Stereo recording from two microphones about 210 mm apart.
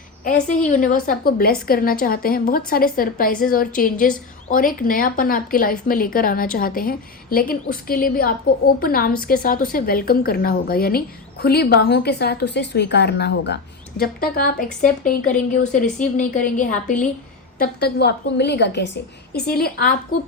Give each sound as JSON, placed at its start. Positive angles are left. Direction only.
{"t": 0.4, "sound": "a woman's voice", "side_deg": 40}
{"t": 17.6, "sound": "a woman's voice", "side_deg": 50}